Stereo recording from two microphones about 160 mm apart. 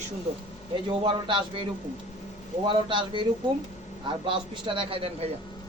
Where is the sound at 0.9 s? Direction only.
30° right (ahead or behind).